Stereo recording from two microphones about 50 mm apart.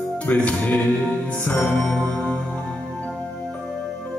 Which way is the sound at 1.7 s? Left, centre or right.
Centre.